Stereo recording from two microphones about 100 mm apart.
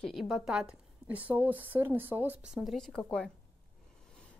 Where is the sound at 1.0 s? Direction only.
15° right (ahead or behind).